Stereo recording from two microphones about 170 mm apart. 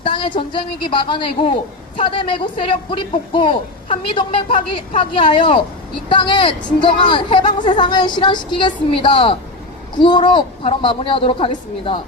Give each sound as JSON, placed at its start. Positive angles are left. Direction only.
{"t": 0.0, "sound": "a man's voice", "side_deg": 30}